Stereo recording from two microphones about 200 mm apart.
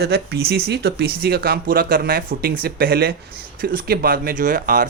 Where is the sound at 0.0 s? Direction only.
55° right (ahead or behind).